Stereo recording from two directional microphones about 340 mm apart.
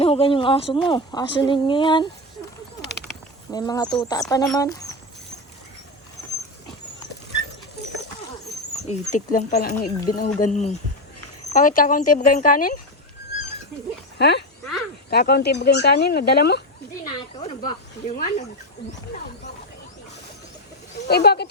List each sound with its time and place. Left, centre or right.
0.0 s speech: centre
3.5 s speech: centre
8.7 s speech: centre
14.2 s speech: left
17.3 s speech: centre
21.1 s speech: left